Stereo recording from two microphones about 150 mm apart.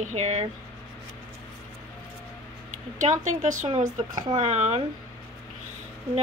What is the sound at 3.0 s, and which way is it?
Speech, 55° right (ahead or behind).